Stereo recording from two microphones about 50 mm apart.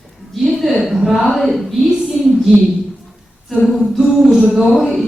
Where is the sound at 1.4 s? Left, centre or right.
Centre.